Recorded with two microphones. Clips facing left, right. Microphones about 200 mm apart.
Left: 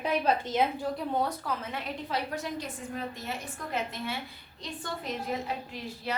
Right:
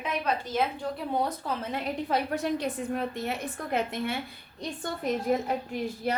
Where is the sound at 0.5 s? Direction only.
20° left (ahead or behind).